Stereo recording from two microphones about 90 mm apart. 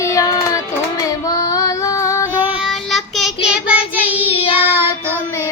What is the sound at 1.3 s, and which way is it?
Female singing, 40° left (ahead or behind).